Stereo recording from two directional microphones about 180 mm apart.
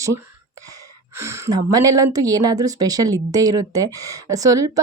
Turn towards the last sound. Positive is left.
turn(degrees=-20)  # may be behind; listen again after turning